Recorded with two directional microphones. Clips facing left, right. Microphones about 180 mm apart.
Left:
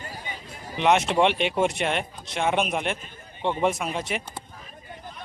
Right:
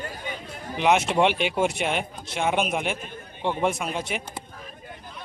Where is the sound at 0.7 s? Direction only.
Centre (ahead or behind).